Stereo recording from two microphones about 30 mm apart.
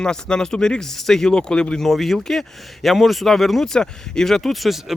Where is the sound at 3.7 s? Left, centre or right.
Left.